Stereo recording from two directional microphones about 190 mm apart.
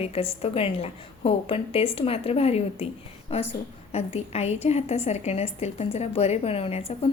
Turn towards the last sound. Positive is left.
turn(degrees=30)  # may be behind; listen again after turning